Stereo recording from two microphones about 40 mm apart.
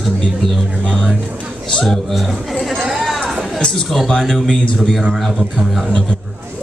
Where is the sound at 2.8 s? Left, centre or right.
Centre.